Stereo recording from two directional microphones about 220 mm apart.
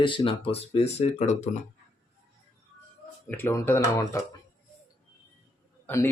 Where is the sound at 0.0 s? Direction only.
25° left (ahead or behind).